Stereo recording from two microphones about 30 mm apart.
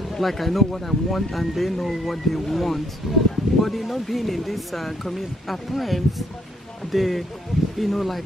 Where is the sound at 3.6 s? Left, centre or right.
Centre.